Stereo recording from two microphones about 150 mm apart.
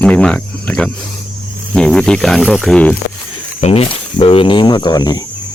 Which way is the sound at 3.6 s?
45° left (ahead or behind).